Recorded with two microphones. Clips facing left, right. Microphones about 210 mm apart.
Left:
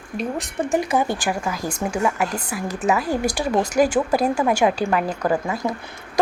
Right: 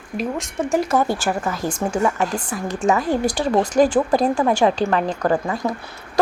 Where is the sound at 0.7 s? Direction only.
Centre (ahead or behind).